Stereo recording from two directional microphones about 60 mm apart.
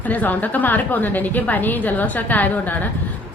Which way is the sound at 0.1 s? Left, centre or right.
Left.